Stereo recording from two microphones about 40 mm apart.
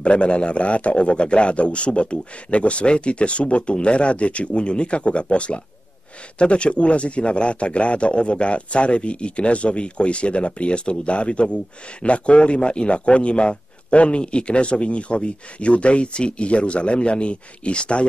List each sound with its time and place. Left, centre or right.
0.0 s speech: left